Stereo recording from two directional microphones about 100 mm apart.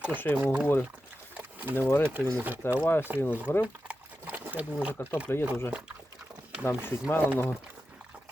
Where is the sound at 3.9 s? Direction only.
15° right (ahead or behind).